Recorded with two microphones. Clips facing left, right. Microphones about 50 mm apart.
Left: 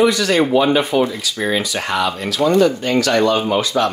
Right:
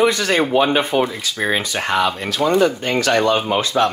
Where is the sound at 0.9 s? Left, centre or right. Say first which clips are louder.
Left 2 dB; centre.